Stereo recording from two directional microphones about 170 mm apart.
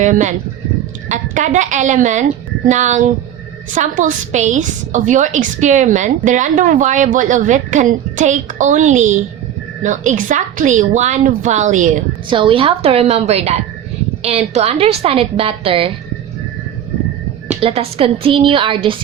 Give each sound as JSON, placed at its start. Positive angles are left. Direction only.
{"t": 0.0, "sound": "a woman's voice", "side_deg": -45}
{"t": 12.3, "sound": "a woman's voice", "side_deg": -30}
{"t": 17.6, "sound": "a woman's voice", "side_deg": -35}